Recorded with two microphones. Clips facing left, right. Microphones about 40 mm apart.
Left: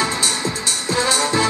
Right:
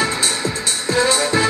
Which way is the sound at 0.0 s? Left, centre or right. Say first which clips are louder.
Right 1 dB; centre.